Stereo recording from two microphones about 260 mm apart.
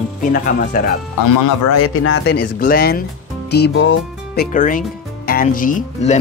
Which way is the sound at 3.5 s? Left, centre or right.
Left.